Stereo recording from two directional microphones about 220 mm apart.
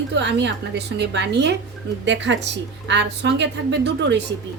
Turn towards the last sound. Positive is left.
turn(degrees=-50)  # may be behind; listen again after turning